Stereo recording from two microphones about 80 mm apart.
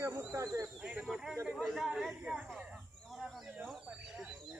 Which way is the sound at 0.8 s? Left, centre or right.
Centre.